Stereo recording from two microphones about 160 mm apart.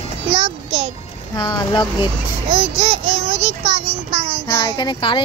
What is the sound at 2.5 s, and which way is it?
A child's voice, 40° right (ahead or behind).